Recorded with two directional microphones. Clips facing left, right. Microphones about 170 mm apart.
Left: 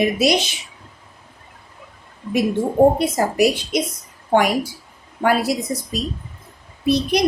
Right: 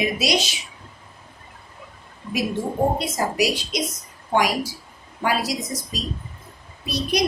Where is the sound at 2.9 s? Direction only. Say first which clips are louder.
Left 5 dB; 55° left (ahead or behind).